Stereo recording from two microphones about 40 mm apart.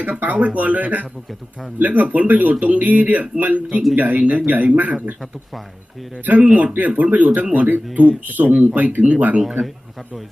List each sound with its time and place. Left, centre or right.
0.0 s speech: right
6.4 s speech: right
9.4 s speech: centre